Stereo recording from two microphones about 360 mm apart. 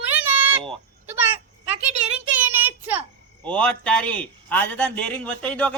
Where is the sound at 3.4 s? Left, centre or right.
Centre.